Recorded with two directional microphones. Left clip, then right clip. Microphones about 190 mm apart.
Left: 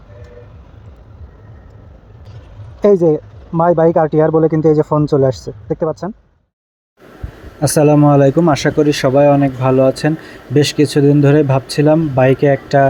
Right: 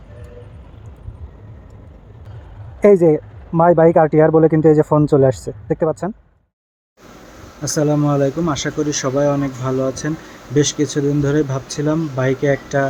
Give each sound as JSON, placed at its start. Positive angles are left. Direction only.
{"t": 2.8, "sound": "speech", "side_deg": 0}
{"t": 7.6, "sound": "speech", "side_deg": 25}